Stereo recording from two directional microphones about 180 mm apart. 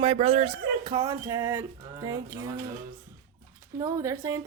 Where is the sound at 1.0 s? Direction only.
15° right (ahead or behind).